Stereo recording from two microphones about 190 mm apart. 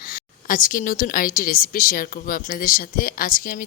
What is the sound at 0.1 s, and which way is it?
A woman's voice, 45° left (ahead or behind).